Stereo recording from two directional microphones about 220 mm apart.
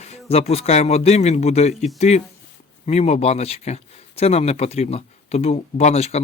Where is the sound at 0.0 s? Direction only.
30° left (ahead or behind).